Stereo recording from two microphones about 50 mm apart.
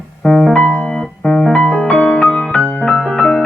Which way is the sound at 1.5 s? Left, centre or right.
Centre.